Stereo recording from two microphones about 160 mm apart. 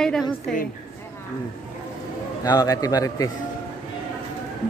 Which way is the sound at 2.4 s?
25° left (ahead or behind).